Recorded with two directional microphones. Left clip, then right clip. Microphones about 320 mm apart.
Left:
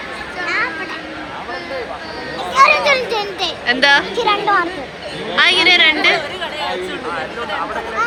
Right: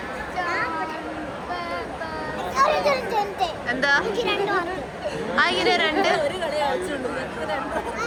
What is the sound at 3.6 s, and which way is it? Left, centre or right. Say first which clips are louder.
Speech: left 9 dB; centre.